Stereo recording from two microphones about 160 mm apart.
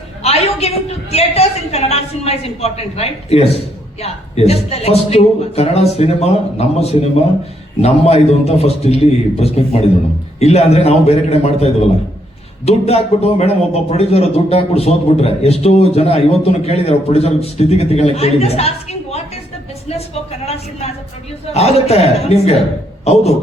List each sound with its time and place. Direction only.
0.2 s a man's voice: 40° left (ahead or behind)